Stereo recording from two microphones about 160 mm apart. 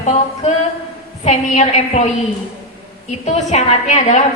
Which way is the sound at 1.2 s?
45° left (ahead or behind).